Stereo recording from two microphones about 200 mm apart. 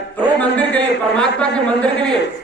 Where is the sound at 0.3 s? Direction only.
10° left (ahead or behind).